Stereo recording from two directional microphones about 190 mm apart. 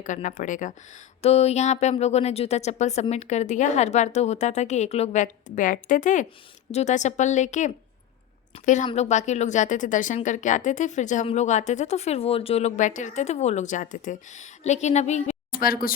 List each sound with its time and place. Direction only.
0.0 s speech: 40° left (ahead or behind)